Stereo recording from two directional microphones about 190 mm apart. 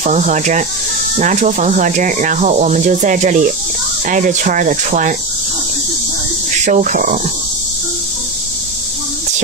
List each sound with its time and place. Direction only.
0.0 s speech: 40° right (ahead or behind)
6.6 s speech: 40° right (ahead or behind)